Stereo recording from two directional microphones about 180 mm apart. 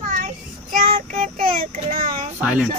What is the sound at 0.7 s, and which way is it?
Child singing, 50° right (ahead or behind).